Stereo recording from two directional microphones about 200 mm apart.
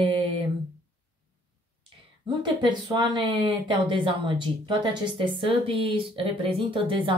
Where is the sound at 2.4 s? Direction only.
20° right (ahead or behind).